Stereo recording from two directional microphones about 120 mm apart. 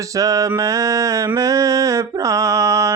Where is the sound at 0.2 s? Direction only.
30° right (ahead or behind).